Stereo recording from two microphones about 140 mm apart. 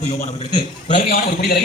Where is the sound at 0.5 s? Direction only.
70° left (ahead or behind); by 1.6 s 90° left.